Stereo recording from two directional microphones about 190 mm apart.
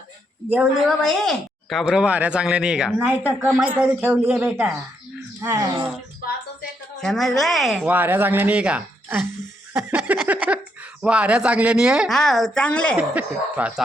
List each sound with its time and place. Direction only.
0.5 s a woman's voice: 5° right (ahead or behind)
7.0 s a woman's voice: centre (ahead or behind)
13.0 s speech: 5° right (ahead or behind)